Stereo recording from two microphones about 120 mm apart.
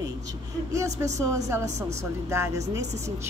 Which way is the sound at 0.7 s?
25° right (ahead or behind).